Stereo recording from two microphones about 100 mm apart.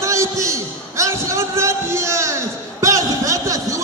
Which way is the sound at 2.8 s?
35° right (ahead or behind).